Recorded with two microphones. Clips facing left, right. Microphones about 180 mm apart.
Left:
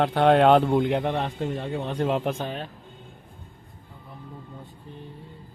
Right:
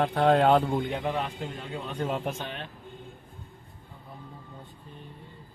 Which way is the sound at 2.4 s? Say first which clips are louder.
Left 6 dB; 40° left (ahead or behind).